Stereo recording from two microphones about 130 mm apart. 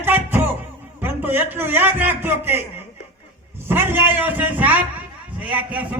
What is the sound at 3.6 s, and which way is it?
A man's voice, 15° right (ahead or behind).